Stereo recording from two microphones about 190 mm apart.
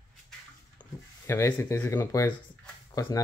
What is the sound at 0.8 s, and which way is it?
Speech, 15° left (ahead or behind).